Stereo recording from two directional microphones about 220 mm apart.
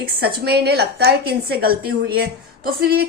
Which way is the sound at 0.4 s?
45° right (ahead or behind).